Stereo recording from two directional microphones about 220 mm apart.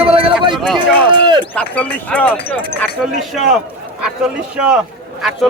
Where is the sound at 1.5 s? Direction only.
5° left (ahead or behind).